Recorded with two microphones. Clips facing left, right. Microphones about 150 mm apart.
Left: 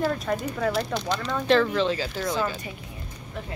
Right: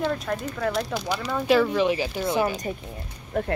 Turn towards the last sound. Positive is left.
turn(degrees=-55)  # may be behind; listen again after turning